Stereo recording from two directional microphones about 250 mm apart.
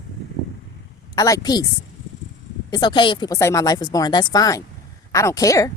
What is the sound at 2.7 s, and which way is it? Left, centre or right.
Speech, centre.